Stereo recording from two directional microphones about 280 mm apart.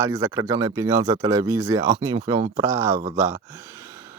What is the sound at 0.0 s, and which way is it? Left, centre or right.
Speech, centre.